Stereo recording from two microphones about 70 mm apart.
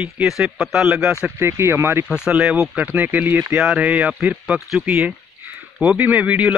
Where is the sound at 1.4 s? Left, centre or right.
Right.